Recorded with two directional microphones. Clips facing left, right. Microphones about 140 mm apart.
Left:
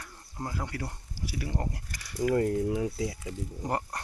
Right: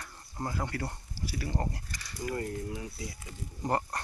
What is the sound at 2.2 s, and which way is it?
Speech, 85° left.